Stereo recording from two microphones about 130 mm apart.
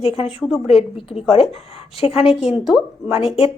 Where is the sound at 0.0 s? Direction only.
50° left (ahead or behind).